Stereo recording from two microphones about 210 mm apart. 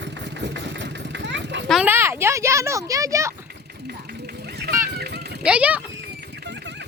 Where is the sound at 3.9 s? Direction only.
50° right (ahead or behind).